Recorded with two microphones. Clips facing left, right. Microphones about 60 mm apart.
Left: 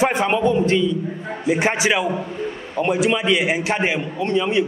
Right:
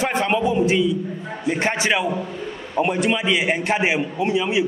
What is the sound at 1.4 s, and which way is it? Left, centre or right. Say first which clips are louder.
Speech: left 3 dB; centre.